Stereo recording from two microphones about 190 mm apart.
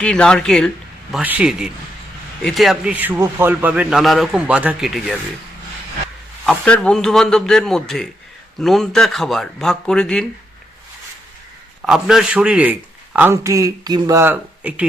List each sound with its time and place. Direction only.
0.0 s a man's voice: 5° left (ahead or behind)
6.4 s a man's voice: 5° left (ahead or behind)
11.9 s a man's voice: centre (ahead or behind)